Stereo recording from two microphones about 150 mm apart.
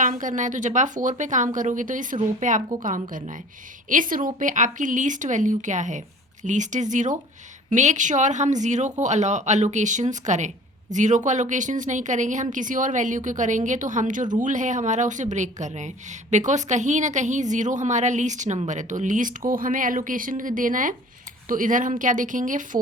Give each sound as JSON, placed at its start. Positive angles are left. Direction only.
{"t": 0.0, "sound": "a woman's voice", "side_deg": -60}